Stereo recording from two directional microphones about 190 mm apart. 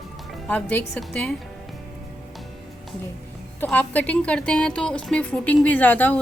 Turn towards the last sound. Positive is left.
turn(degrees=10)  # may be behind; listen again after turning